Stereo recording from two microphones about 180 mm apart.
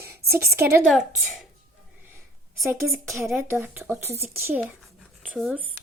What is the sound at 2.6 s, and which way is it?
Speech, 15° right (ahead or behind).